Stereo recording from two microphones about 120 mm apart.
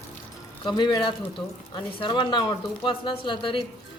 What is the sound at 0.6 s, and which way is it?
A woman's voice, 40° left (ahead or behind).